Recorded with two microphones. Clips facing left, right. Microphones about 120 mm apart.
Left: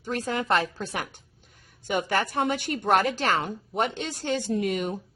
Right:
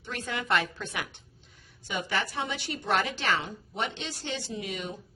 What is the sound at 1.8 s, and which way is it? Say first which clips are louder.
A woman's voice: left 6 dB; 50° left (ahead or behind).